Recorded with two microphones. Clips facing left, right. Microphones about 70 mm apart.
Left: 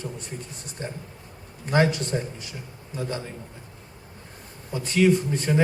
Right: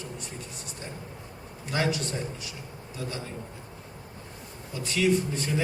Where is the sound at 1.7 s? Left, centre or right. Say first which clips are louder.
Left 6 dB; left.